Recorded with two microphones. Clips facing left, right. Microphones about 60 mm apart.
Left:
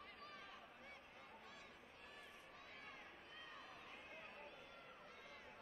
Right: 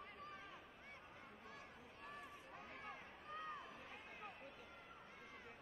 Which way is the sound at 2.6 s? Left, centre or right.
Right.